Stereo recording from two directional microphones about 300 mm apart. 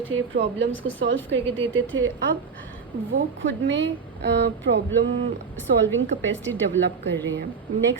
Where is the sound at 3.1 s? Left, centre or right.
Right.